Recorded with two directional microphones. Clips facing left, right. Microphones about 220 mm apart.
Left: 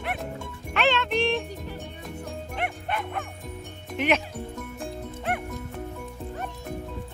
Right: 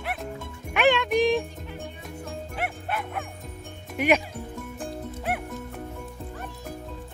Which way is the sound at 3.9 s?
10° right (ahead or behind).